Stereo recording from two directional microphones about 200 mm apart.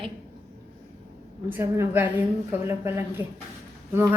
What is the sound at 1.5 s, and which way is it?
A woman's voice, 10° right (ahead or behind).